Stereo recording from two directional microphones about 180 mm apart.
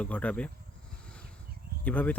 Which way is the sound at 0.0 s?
5° left (ahead or behind).